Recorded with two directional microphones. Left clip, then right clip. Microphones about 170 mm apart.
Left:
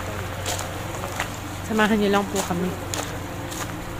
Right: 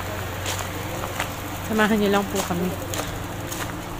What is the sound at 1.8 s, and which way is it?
Speech, centre (ahead or behind).